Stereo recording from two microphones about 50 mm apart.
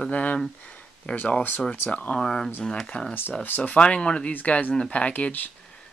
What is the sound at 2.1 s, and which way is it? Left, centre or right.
Speech, centre.